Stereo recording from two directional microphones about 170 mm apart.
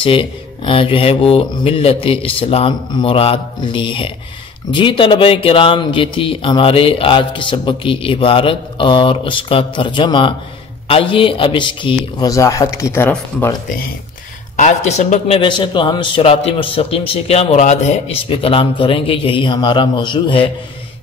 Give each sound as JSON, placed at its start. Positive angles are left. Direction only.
{"t": 0.0, "sound": "a man's voice", "side_deg": 30}
{"t": 14.6, "sound": "a man's voice", "side_deg": 45}